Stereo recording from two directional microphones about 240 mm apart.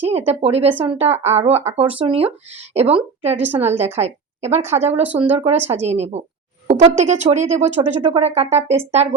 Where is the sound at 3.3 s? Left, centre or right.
Centre.